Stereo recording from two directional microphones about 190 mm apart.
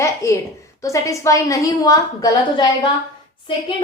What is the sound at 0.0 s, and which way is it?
A woman's voice, 15° left (ahead or behind).